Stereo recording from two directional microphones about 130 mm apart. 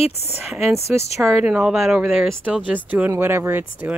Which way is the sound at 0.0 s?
55° left (ahead or behind).